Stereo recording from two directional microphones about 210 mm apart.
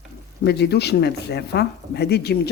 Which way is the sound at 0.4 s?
50° left (ahead or behind).